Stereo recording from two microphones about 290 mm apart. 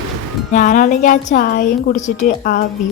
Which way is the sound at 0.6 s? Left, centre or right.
Left.